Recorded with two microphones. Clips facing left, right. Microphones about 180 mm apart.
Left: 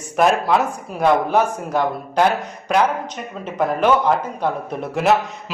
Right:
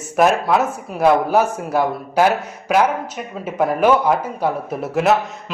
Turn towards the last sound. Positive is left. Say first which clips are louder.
# even
turn(degrees=0)  # may be behind; listen again after turning